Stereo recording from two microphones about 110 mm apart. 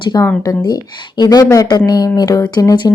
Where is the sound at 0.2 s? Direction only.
20° left (ahead or behind).